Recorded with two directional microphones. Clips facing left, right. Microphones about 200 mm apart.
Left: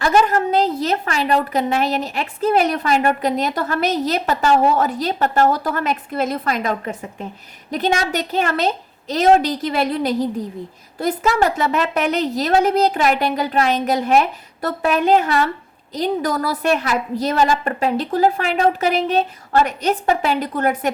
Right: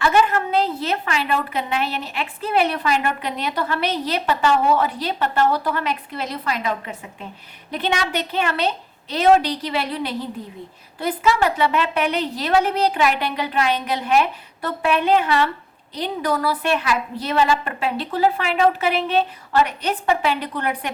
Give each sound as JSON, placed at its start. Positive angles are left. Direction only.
{"t": 0.0, "sound": "a woman's voice", "side_deg": 40}